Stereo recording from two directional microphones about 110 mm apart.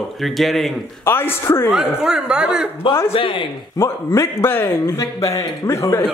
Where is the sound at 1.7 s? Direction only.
5° right (ahead or behind).